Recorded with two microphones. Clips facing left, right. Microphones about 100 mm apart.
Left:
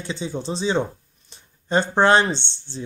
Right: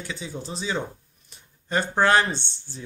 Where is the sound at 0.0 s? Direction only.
30° left (ahead or behind).